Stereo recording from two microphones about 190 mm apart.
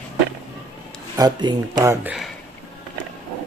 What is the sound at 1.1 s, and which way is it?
Speech, 20° right (ahead or behind).